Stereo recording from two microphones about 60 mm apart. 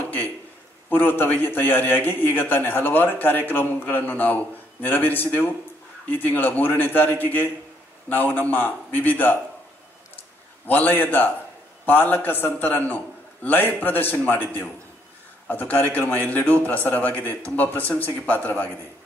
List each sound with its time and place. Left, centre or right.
0.0 s a sound: left
0.8 s a man's voice: left
10.7 s a man's voice: left